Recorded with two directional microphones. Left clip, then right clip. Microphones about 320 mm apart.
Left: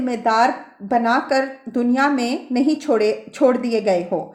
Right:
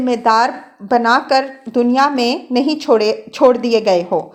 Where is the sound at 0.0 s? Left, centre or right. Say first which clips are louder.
Right 4 dB; right.